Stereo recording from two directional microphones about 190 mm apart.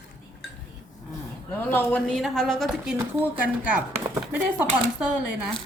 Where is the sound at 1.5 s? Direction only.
10° left (ahead or behind).